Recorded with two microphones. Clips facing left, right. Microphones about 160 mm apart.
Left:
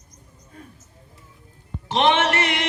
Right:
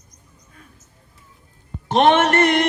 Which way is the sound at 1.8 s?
50° right (ahead or behind).